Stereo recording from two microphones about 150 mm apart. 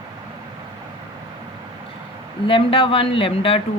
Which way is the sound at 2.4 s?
35° left (ahead or behind).